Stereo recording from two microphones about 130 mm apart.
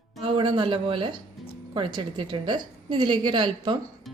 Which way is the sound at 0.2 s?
40° right (ahead or behind).